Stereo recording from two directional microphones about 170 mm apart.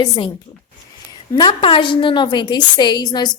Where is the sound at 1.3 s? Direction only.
25° left (ahead or behind).